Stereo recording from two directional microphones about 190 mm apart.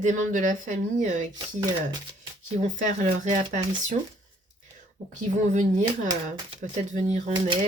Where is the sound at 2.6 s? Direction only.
40° right (ahead or behind).